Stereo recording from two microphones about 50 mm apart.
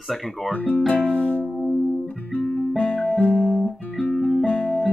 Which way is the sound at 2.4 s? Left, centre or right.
Left.